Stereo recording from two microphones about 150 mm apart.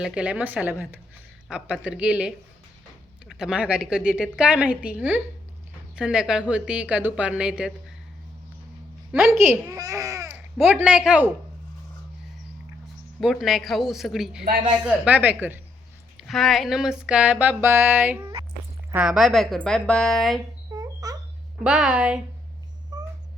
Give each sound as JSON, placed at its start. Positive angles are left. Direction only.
{"t": 0.0, "sound": "music", "side_deg": -5}
{"t": 9.3, "sound": "a woman's voice", "side_deg": -20}
{"t": 13.1, "sound": "a woman's voice", "side_deg": 0}
{"t": 14.8, "sound": "music", "side_deg": -10}
{"t": 16.1, "sound": "music", "side_deg": 0}
{"t": 18.9, "sound": "a woman's voice", "side_deg": -5}
{"t": 20.7, "sound": "a sound", "side_deg": -25}
{"t": 21.6, "sound": "music", "side_deg": -5}